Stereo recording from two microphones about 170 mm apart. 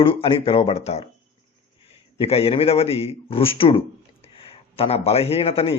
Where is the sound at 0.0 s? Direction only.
30° left (ahead or behind).